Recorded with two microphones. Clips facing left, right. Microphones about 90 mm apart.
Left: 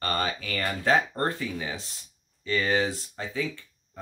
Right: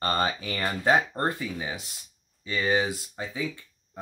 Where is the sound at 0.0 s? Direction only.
25° right (ahead or behind).